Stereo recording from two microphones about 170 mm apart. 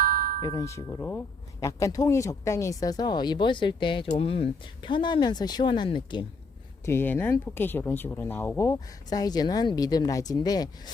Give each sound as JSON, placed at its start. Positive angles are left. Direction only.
{"t": 0.0, "sound": "music", "side_deg": -55}
{"t": 0.4, "sound": "speech", "side_deg": 20}
{"t": 6.8, "sound": "speech", "side_deg": 10}